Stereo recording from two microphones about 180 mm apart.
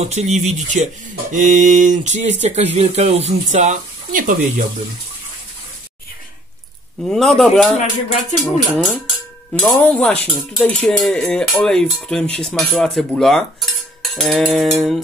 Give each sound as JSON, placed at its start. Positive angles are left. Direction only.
{"t": 0.0, "sound": "speech", "side_deg": -40}
{"t": 1.3, "sound": "mantra", "side_deg": -45}
{"t": 2.4, "sound": "speech", "side_deg": -35}
{"t": 7.1, "sound": "cutlery", "side_deg": 0}
{"t": 7.7, "sound": "music", "side_deg": 40}
{"t": 8.7, "sound": "cutlery", "side_deg": 5}
{"t": 9.5, "sound": "speech", "side_deg": 10}
{"t": 10.6, "sound": "cutlery", "side_deg": 5}